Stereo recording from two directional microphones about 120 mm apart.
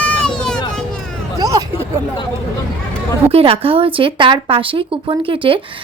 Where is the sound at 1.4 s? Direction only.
30° right (ahead or behind).